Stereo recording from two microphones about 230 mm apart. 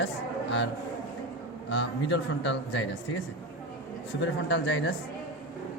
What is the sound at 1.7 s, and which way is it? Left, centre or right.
Speech, left.